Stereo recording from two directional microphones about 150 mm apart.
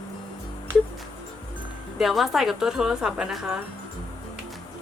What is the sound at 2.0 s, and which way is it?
A woman's voice, centre (ahead or behind).